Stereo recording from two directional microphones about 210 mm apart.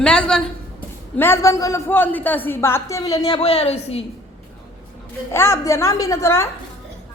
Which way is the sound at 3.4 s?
30° left (ahead or behind).